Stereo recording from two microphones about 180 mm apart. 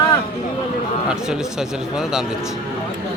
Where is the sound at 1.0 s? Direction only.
5° right (ahead or behind).